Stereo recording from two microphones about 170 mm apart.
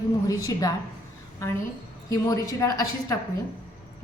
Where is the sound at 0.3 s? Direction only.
20° left (ahead or behind).